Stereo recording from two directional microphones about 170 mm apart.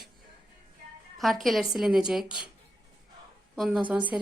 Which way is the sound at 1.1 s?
Centre (ahead or behind).